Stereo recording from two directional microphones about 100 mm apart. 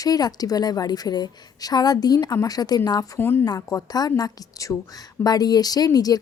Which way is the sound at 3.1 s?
20° left (ahead or behind).